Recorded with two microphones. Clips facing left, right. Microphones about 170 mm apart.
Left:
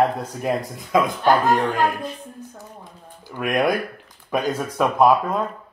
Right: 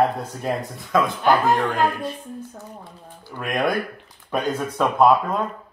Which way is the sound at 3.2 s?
15° left (ahead or behind).